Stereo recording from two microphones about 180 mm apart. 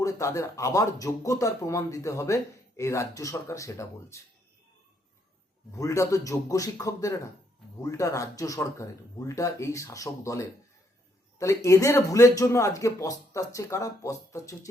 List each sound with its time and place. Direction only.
0.0 s speech: 15° left (ahead or behind)
5.7 s speech: 15° left (ahead or behind)